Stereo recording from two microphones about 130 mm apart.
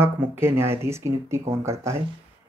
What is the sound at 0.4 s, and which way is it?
Speech, 20° right (ahead or behind).